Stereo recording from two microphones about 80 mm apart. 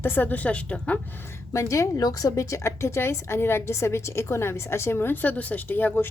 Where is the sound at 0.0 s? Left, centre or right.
Left.